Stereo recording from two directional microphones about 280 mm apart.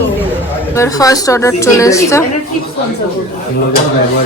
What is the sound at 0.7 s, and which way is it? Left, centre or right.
A woman's voice, centre.